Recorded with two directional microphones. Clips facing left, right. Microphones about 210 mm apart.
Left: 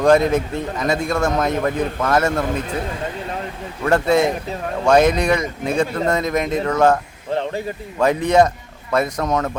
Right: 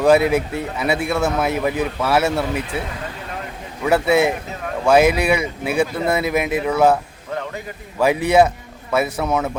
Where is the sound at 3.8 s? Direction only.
5° right (ahead or behind).